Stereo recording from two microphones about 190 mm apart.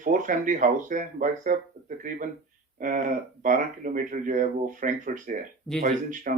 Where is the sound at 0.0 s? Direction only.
45° right (ahead or behind).